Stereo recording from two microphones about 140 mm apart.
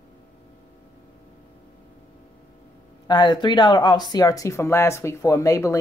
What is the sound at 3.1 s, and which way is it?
Speech, 30° left (ahead or behind).